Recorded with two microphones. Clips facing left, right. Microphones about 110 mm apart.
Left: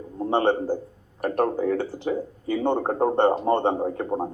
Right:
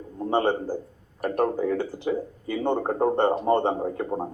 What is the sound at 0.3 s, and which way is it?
Speech, 25° left (ahead or behind).